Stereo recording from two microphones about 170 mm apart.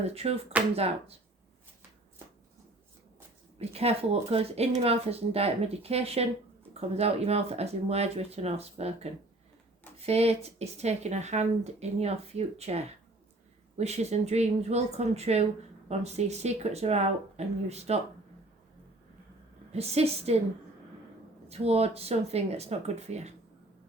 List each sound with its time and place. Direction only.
0.0 s speech: 35° right (ahead or behind)
3.6 s speech: 35° right (ahead or behind)
10.0 s speech: 35° right (ahead or behind)
19.7 s speech: 40° right (ahead or behind)
21.5 s speech: 35° right (ahead or behind)